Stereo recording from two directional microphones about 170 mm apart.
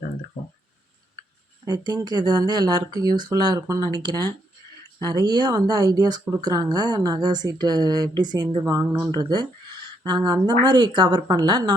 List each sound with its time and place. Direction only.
1.6 s a woman's voice: 25° right (ahead or behind)